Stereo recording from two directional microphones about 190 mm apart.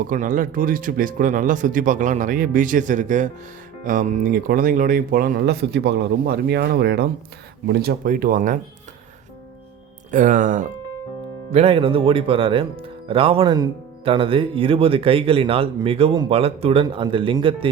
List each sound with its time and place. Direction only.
0.1 s speech: 45° right (ahead or behind)
10.1 s speech: 45° right (ahead or behind)
11.5 s speech: 30° right (ahead or behind)